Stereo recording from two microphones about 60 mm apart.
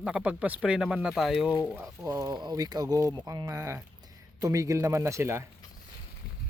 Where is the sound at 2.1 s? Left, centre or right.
Right.